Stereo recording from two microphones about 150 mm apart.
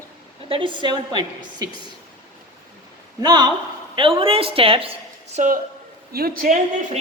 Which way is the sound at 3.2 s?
30° right (ahead or behind).